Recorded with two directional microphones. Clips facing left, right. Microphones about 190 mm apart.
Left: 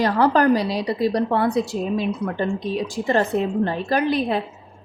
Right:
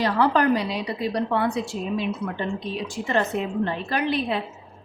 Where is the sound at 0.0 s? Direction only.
40° left (ahead or behind).